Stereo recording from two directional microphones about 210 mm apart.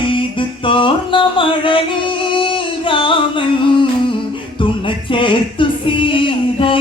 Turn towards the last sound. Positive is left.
turn(degrees=25)  # may be behind; listen again after turning